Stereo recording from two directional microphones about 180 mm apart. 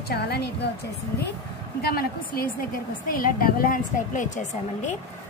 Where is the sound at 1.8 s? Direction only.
55° left (ahead or behind).